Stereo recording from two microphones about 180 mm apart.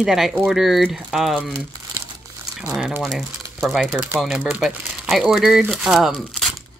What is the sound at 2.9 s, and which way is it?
A woman's voice, 5° right (ahead or behind).